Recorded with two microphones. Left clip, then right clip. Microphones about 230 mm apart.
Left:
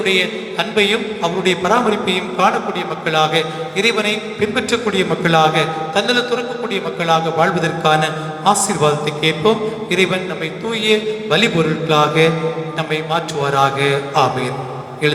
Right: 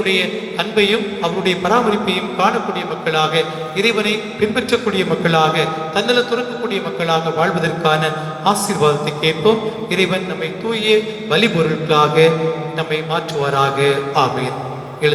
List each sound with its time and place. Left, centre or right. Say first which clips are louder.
0.0 s a man's voice: left 1 dB; left